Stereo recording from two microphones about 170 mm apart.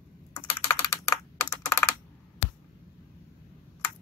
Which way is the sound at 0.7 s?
20° left (ahead or behind).